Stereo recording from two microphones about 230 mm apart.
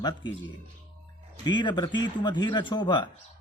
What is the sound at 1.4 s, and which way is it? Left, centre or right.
Speech, centre.